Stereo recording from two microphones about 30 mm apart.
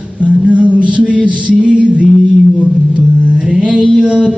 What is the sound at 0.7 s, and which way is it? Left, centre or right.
Music, right.